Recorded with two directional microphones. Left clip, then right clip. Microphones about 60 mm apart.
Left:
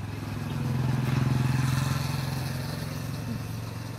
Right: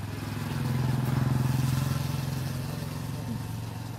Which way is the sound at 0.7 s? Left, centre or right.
Left.